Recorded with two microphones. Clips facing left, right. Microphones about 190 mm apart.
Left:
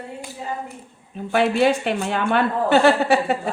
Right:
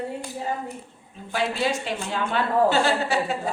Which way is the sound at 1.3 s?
60° left (ahead or behind).